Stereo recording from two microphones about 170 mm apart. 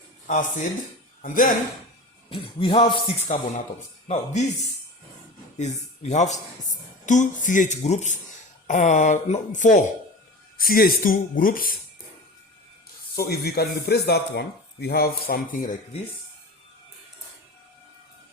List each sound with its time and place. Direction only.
0.3 s speech: 45° left (ahead or behind)
2.3 s music: 30° left (ahead or behind)
4.1 s music: 40° left (ahead or behind)
5.5 s speech: 40° left (ahead or behind)
10.6 s speech: 60° left (ahead or behind)
13.1 s speech: 65° left (ahead or behind)